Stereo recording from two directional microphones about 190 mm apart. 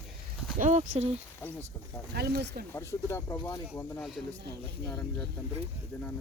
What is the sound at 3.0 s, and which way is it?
Speech, 20° left (ahead or behind).